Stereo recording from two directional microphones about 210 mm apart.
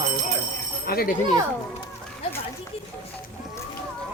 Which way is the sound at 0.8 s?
45° left (ahead or behind).